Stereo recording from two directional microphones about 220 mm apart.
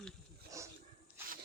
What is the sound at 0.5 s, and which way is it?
Dog, 15° right (ahead or behind).